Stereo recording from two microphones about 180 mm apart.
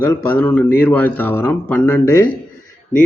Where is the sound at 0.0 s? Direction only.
10° left (ahead or behind).